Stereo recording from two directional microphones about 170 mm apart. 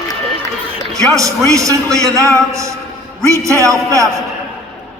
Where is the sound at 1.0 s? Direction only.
20° right (ahead or behind).